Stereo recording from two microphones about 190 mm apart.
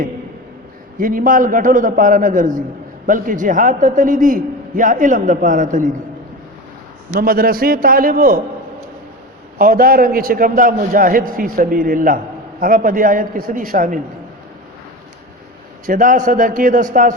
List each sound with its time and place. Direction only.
0.9 s a man's voice: 45° right (ahead or behind)
7.1 s a man's voice: 50° right (ahead or behind)
9.6 s a man's voice: 50° right (ahead or behind)
15.9 s a man's voice: 45° right (ahead or behind)